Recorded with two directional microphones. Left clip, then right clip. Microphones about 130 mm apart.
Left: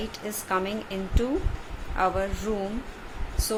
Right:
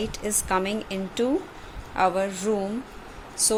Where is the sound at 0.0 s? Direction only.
40° right (ahead or behind).